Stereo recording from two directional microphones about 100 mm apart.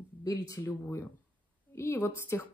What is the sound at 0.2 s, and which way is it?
Speech, 35° left (ahead or behind).